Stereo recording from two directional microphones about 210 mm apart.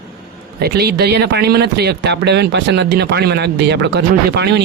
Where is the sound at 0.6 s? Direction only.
50° right (ahead or behind).